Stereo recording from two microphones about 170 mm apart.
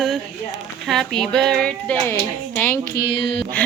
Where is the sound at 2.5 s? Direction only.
10° left (ahead or behind); by 3.5 s 30° left (ahead or behind).